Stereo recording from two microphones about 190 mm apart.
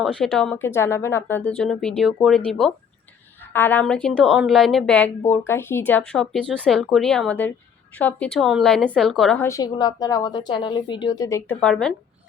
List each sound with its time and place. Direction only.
0.0 s a woman's voice: 5° left (ahead or behind)
9.4 s a woman's voice: 15° left (ahead or behind)
11.6 s a woman's voice: 5° left (ahead or behind)